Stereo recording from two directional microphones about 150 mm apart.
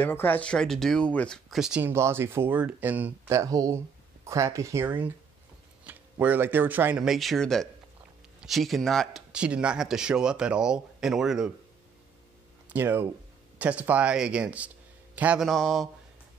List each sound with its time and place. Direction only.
0.0 s speech: 15° left (ahead or behind); by 11.5 s 5° right (ahead or behind)
12.6 s speech: 15° right (ahead or behind)
15.4 s speech: centre (ahead or behind)